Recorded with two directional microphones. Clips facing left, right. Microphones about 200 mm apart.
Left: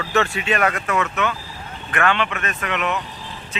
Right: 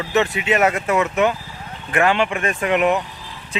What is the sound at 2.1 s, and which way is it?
Speech, 15° right (ahead or behind).